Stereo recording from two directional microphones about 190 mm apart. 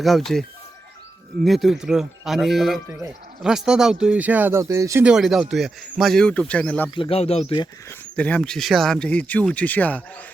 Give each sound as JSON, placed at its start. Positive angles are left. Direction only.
{"t": 0.0, "sound": "speech", "side_deg": 0}
{"t": 1.5, "sound": "speech", "side_deg": 0}
{"t": 5.0, "sound": "speech", "side_deg": 0}
{"t": 6.9, "sound": "speech", "side_deg": 30}
{"t": 7.9, "sound": "speech", "side_deg": 5}